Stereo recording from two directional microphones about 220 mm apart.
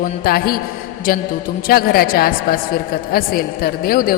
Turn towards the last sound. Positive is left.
turn(degrees=40)  # may be behind; listen again after turning